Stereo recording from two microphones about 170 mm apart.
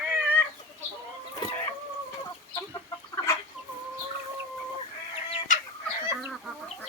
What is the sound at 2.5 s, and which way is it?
Chicken, 20° left (ahead or behind).